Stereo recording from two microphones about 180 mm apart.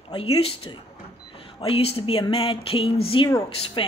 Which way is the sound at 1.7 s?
35° left (ahead or behind).